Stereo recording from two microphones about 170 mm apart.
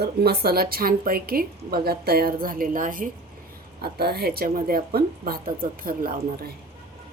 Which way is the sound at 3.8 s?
70° right (ahead or behind).